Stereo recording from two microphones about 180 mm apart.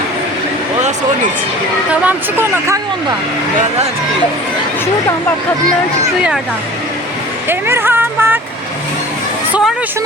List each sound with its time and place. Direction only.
0.8 s a sound: 40° right (ahead or behind)
1.9 s speech: 10° right (ahead or behind)
7.4 s speech: 10° right (ahead or behind)